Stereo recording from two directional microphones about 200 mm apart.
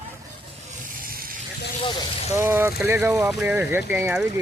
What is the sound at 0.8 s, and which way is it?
Vehicle, 45° right (ahead or behind).